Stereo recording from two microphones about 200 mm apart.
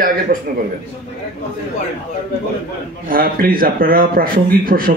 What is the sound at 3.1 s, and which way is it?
A man's voice, 45° right (ahead or behind).